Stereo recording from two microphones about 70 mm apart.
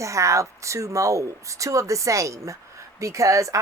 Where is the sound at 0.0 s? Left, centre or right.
Right.